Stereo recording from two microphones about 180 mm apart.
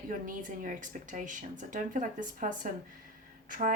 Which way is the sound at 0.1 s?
50° right (ahead or behind).